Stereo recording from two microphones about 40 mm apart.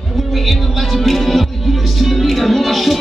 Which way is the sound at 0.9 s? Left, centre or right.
Centre.